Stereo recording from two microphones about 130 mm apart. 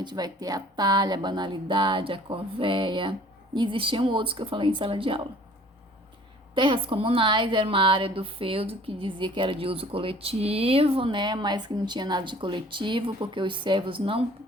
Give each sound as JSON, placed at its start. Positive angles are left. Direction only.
{"t": 0.0, "sound": "a woman's voice", "side_deg": -35}
{"t": 6.5, "sound": "a woman's voice", "side_deg": -40}